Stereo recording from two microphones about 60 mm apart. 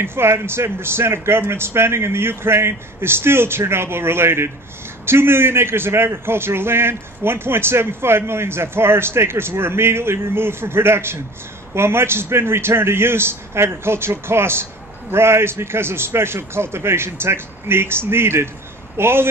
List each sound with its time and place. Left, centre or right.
0.0 s a man's voice: right